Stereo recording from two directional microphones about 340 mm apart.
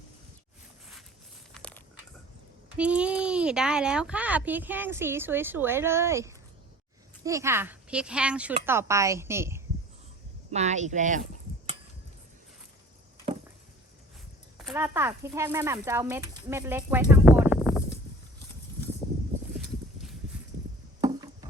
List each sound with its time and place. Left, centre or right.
1.5 s a sound: centre
2.7 s speech: centre
10.5 s speech: centre
14.6 s speech: centre
21.0 s chop: centre